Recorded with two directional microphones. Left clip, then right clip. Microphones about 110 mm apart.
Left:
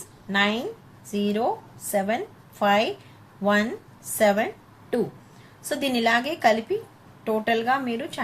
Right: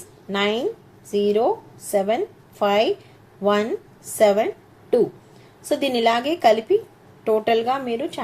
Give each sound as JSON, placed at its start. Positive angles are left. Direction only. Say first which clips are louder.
{"t": 0.3, "sound": "a woman's voice", "louder": "right 2 dB", "side_deg": -30}
{"t": 4.2, "sound": "a sound", "louder": "right 4 dB", "side_deg": -30}
{"t": 5.6, "sound": "a woman's voice", "louder": "right 4 dB", "side_deg": -20}